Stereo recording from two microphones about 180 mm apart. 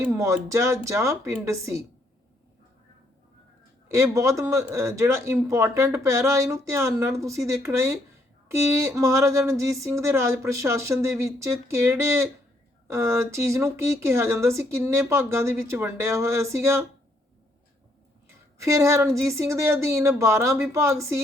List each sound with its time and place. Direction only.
0.0 s speech: 15° right (ahead or behind)
3.9 s speech: 15° right (ahead or behind)
18.3 s speech: 15° right (ahead or behind)